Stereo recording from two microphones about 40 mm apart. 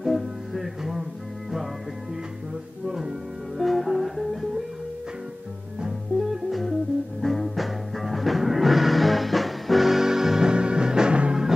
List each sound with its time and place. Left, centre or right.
0.0 s music: centre
2.9 s music: centre
3.5 s music: centre
5.8 s music: centre
7.2 s music: centre
10.5 s music: right